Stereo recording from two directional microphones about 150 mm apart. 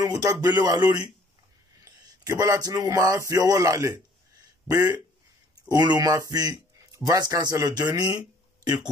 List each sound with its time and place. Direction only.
0.0 s speech: 25° right (ahead or behind)